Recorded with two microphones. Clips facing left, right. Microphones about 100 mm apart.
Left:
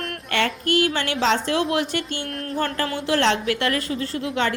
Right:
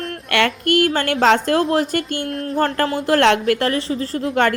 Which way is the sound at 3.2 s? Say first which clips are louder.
Right 6 dB; 55° right (ahead or behind).